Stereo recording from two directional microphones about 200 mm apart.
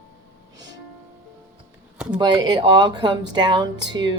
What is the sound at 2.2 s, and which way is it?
Speech, 20° right (ahead or behind).